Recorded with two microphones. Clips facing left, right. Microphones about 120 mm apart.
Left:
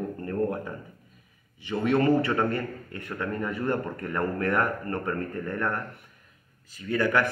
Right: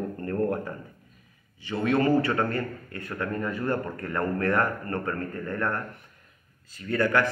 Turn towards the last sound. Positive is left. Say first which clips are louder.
# right 1 dB
turn(degrees=15)  # may be behind; listen again after turning